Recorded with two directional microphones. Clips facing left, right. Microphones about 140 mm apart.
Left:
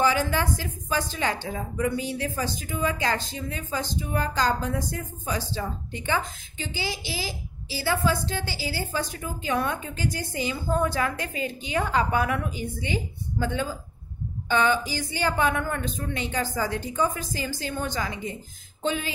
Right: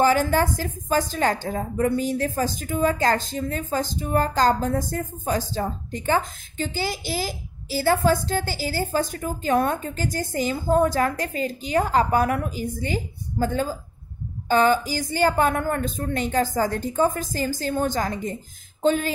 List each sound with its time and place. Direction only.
0.0 s a woman's voice: 45° right (ahead or behind)